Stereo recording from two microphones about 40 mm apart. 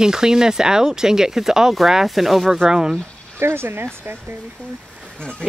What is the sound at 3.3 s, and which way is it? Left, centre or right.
Speech, right.